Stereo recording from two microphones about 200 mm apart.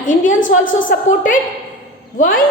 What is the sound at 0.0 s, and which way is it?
A woman's voice, 40° left (ahead or behind).